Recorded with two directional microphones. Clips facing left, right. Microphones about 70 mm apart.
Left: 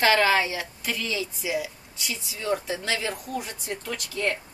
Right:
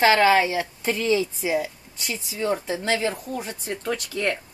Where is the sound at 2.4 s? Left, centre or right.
Right.